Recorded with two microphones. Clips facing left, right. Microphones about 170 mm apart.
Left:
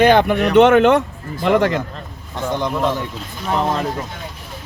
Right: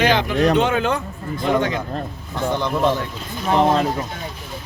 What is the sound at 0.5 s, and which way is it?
Speech, 70° left (ahead or behind).